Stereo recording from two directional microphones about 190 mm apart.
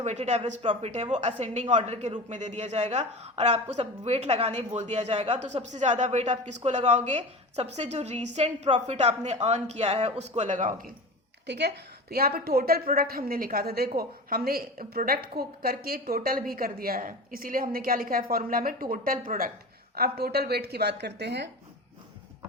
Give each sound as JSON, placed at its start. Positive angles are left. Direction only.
{"t": 0.0, "sound": "a woman's voice", "side_deg": -35}
{"t": 11.4, "sound": "a woman's voice", "side_deg": -60}